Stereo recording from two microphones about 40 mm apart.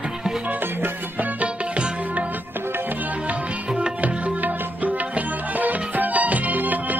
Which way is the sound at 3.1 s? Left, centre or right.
Right.